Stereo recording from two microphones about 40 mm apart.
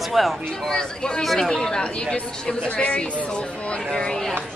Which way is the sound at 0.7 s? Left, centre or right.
Centre.